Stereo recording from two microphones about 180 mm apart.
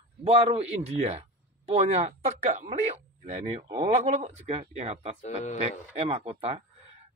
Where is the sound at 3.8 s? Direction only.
35° right (ahead or behind).